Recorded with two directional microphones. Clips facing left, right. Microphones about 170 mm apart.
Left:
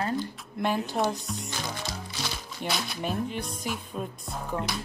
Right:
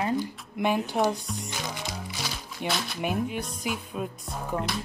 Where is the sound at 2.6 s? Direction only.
Centre (ahead or behind).